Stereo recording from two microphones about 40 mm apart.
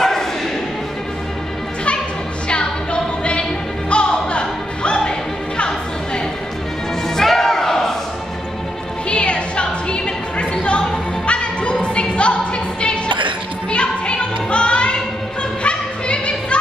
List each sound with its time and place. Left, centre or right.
0.0 s a sound: centre
2.4 s music: left
7.2 s music: centre
9.1 s music: left
13.7 s music: left